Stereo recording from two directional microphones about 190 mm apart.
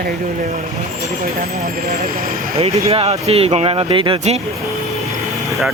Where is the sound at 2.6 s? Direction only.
30° right (ahead or behind).